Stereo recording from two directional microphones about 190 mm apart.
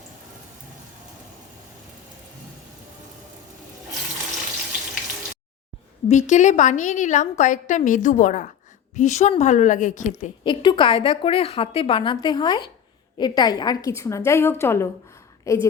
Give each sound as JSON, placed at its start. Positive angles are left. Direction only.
{"t": 6.1, "sound": "a woman's voice", "side_deg": 40}
{"t": 10.4, "sound": "a woman's voice", "side_deg": 25}